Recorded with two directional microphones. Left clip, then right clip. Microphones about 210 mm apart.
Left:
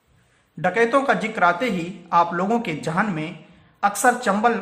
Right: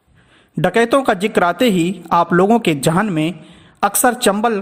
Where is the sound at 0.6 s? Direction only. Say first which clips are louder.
Right 5 dB; 50° right (ahead or behind).